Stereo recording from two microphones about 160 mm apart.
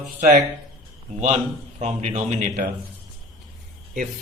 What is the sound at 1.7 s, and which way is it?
Speech, 45° right (ahead or behind).